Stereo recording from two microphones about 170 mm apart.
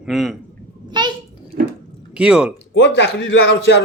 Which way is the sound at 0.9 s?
25° right (ahead or behind).